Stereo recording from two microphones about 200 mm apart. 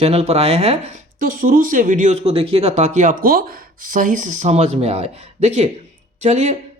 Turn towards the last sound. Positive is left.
turn(degrees=-35)  # may be behind; listen again after turning